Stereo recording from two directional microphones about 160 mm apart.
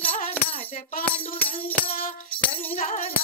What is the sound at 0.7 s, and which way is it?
Music, 60° left (ahead or behind).